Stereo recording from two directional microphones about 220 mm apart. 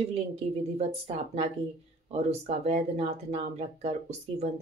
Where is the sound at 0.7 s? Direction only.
30° right (ahead or behind).